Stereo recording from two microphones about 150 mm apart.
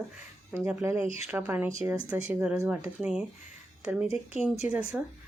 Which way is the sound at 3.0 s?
5° right (ahead or behind).